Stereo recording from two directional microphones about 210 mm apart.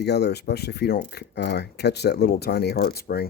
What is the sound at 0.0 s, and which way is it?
Speech, 50° left (ahead or behind).